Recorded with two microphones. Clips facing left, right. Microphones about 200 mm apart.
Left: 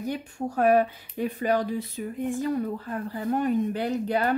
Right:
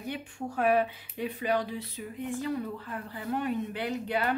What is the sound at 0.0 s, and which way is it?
Speech, 40° left (ahead or behind).